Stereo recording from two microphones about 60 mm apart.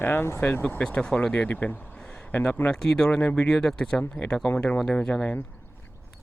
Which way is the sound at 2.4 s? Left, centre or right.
Centre.